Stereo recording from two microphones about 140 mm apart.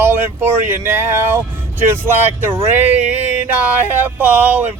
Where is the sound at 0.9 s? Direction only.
15° right (ahead or behind).